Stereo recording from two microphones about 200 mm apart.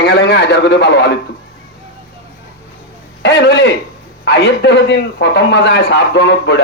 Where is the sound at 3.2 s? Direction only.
55° left (ahead or behind).